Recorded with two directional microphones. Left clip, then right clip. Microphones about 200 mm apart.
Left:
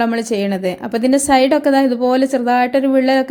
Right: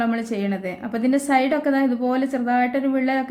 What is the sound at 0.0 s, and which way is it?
A woman's voice, 40° left (ahead or behind).